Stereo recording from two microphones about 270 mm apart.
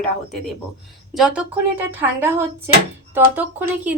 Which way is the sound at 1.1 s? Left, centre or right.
Centre.